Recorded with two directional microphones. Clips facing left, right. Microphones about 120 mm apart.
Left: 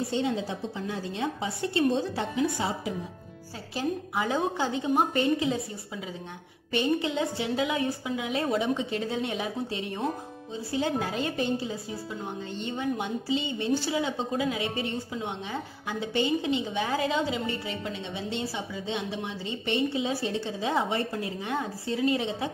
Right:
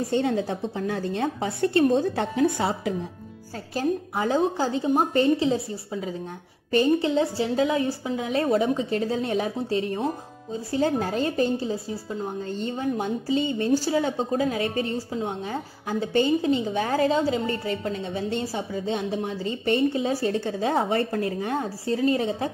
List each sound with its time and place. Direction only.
0.0 s a woman's voice: 50° right (ahead or behind)
3.7 s a woman's voice: 35° right (ahead or behind)